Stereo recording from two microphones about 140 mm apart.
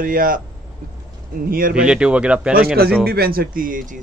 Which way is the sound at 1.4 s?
90° right.